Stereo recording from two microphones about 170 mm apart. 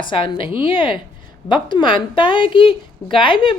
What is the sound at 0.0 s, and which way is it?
A woman's voice, 30° left (ahead or behind).